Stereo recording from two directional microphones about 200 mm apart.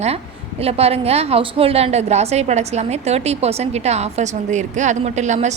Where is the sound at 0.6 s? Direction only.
30° right (ahead or behind).